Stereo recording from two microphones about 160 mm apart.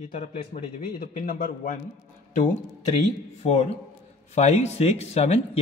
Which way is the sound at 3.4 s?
45° left (ahead or behind).